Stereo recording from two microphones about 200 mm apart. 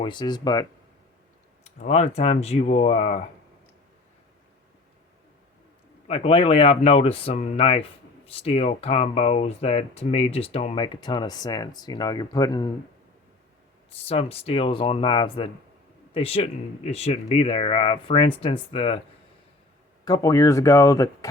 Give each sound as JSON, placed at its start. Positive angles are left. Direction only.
{"t": 0.0, "sound": "speech", "side_deg": 25}
{"t": 1.6, "sound": "speech", "side_deg": 35}
{"t": 6.1, "sound": "speech", "side_deg": 30}
{"t": 13.9, "sound": "speech", "side_deg": 30}
{"t": 20.1, "sound": "speech", "side_deg": 20}